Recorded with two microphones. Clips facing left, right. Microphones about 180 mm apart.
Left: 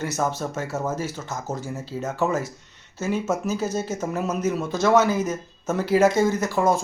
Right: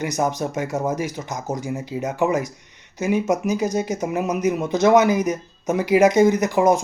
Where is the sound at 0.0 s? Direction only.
15° right (ahead or behind).